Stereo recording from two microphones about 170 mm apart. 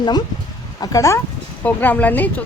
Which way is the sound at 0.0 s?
25° left (ahead or behind).